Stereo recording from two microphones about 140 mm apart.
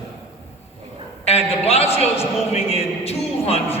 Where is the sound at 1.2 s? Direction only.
45° left (ahead or behind).